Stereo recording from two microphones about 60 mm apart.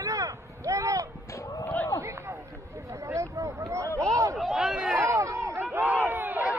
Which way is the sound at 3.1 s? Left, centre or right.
Right.